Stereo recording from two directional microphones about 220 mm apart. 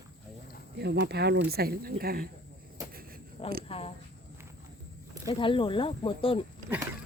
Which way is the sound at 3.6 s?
25° left (ahead or behind).